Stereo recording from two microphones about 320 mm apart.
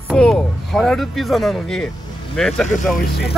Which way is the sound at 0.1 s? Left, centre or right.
Centre.